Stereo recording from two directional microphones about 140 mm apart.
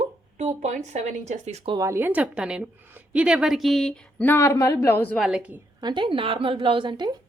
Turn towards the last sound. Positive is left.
turn(degrees=-30)  # may be behind; listen again after turning